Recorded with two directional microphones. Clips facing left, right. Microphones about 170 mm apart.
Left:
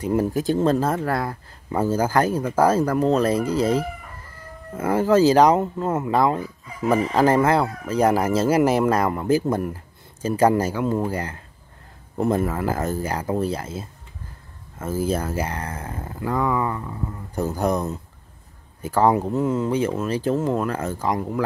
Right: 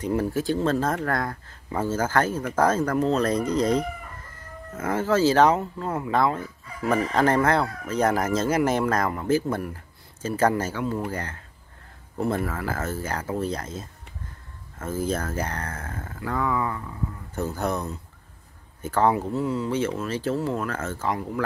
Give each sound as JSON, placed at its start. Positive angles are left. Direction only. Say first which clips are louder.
{"t": 0.0, "sound": "speech", "louder": "left 3 dB", "side_deg": 15}
{"t": 5.6, "sound": "speech", "louder": "left 6 dB", "side_deg": 25}
{"t": 6.1, "sound": "speech", "louder": "left 1 dB", "side_deg": 15}
{"t": 7.2, "sound": "speech", "louder": "left 3 dB", "side_deg": 5}